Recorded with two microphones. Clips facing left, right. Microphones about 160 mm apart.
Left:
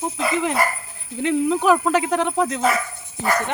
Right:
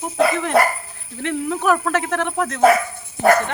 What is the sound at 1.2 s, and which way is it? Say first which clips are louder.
Speech: left 2 dB; 15° left (ahead or behind).